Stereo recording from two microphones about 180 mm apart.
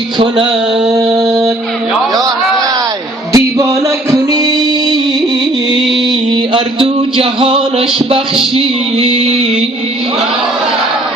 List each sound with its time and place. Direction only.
0.9 s mantra: 20° right (ahead or behind)
3.3 s music: 20° right (ahead or behind)